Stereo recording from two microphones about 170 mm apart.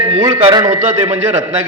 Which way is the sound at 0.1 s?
30° right (ahead or behind).